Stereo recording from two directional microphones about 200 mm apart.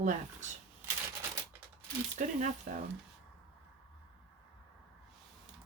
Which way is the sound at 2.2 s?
40° right (ahead or behind).